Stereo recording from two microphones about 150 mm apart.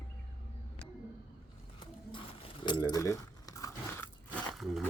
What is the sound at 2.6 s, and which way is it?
Speech, 30° left (ahead or behind).